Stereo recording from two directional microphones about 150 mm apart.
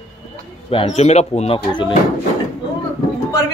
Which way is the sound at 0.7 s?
40° left (ahead or behind).